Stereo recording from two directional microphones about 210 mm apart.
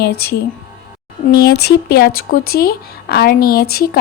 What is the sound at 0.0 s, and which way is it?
Speech, 50° left (ahead or behind).